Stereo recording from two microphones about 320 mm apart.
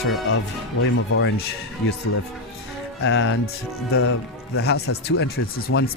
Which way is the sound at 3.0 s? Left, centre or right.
Left.